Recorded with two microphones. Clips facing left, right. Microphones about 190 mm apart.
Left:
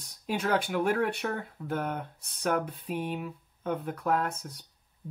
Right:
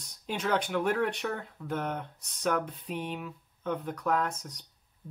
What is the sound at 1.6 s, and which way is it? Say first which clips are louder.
Speech: left 1 dB; 25° left (ahead or behind).